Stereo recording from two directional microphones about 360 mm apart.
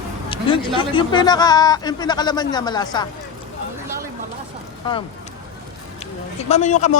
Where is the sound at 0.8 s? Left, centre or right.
Centre.